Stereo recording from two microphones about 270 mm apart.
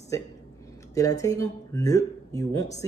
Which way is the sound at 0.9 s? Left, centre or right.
Centre.